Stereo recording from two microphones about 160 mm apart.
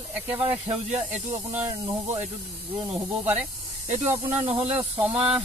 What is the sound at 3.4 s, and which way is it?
Speech, 45° right (ahead or behind).